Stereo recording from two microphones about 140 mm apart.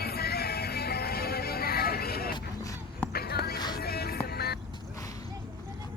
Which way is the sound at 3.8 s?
90° left.